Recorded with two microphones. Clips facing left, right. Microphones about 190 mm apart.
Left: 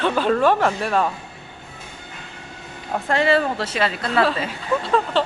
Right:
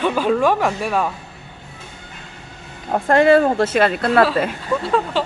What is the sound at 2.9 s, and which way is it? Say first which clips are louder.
Speech: right 6 dB; 50° right (ahead or behind).